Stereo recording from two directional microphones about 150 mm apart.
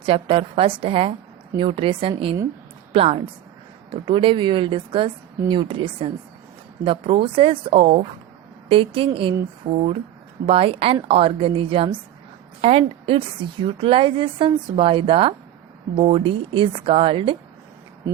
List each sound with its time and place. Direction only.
0.0 s a woman's voice: 35° right (ahead or behind)